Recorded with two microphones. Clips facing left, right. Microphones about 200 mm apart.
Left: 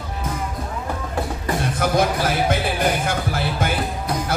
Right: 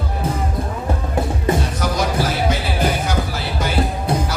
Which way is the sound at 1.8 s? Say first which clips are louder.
Left 4 dB; 55° left (ahead or behind).